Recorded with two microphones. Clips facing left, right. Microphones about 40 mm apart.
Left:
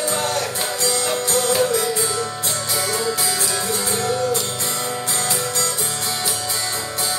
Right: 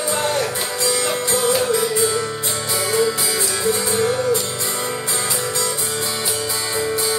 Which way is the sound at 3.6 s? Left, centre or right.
Centre.